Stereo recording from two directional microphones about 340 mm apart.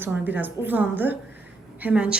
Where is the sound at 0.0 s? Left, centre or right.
Centre.